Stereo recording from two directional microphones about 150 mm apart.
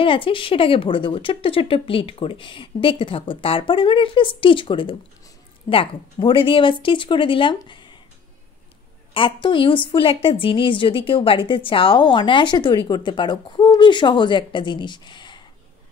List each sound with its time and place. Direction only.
0.0 s a woman's voice: 35° left (ahead or behind)
9.1 s a woman's voice: 35° left (ahead or behind)